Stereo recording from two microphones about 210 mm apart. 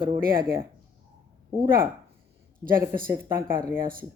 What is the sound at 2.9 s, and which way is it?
Speech, 45° right (ahead or behind).